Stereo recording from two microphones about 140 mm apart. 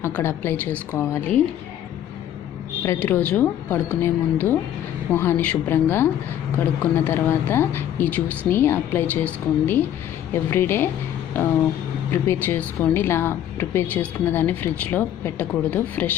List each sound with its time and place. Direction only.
0.0 s a woman's voice: 15° left (ahead or behind)
2.8 s a woman's voice: 15° left (ahead or behind)
12.1 s a woman's voice: 15° left (ahead or behind)